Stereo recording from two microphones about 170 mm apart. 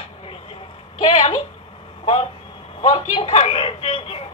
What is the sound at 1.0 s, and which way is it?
Speech, 35° left (ahead or behind).